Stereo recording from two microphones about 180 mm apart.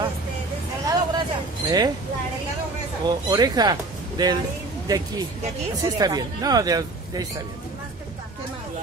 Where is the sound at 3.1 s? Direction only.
25° right (ahead or behind).